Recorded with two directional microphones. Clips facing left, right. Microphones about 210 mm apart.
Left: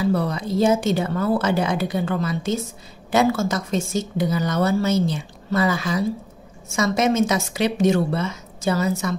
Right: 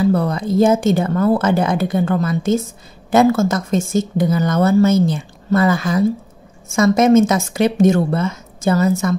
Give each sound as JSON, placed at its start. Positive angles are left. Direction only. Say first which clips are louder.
{"t": 0.0, "sound": "speech", "louder": "right 5 dB", "side_deg": -50}